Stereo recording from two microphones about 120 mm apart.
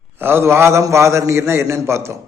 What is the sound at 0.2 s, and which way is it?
Speech, 20° right (ahead or behind).